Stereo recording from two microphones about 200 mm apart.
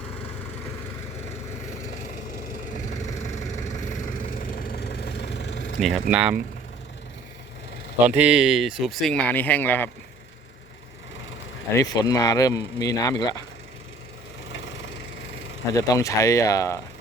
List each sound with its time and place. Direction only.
2.7 s a sound: 35° left (ahead or behind)
3.9 s vehicle: 40° left (ahead or behind); by 5.8 s 65° left (ahead or behind)
5.8 s speech: 5° right (ahead or behind)
8.0 s speech: 5° right (ahead or behind); by 9.9 s 10° left (ahead or behind)
11.7 s speech: 15° left (ahead or behind)
14.5 s wood: 65° left (ahead or behind)
15.7 s speech: 15° left (ahead or behind)